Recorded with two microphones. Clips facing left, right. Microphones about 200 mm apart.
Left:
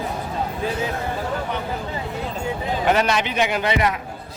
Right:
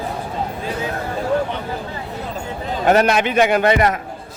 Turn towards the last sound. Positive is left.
turn(degrees=-50)  # may be behind; listen again after turning